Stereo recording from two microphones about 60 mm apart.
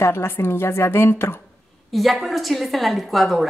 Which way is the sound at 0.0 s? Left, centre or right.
Left.